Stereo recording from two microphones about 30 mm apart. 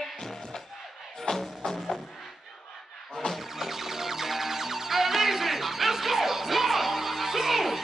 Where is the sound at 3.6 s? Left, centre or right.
Centre.